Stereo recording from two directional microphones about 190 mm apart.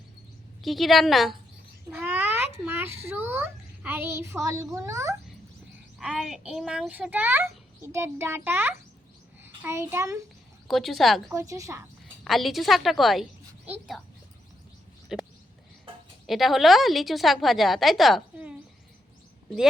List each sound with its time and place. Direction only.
0.6 s a woman's voice: centre (ahead or behind)
1.9 s cat: 10° right (ahead or behind)
3.2 s a child's voice: 10° right (ahead or behind)
6.0 s a child's voice: centre (ahead or behind)
10.7 s a woman's voice: centre (ahead or behind)
11.3 s a child's voice: 15° right (ahead or behind)
12.2 s a woman's voice: centre (ahead or behind)
15.1 s a sound: centre (ahead or behind)
16.2 s a woman's voice: centre (ahead or behind)